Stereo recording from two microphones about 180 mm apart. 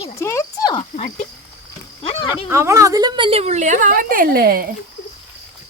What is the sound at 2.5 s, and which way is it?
A woman's voice, 15° right (ahead or behind).